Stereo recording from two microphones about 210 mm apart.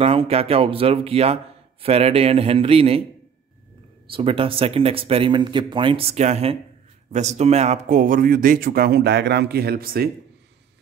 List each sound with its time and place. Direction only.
0.0 s speech: 25° right (ahead or behind)
4.1 s speech: 25° right (ahead or behind); by 10.0 s 45° right (ahead or behind)